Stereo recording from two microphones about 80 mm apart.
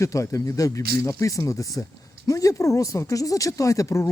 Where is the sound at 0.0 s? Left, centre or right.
Left.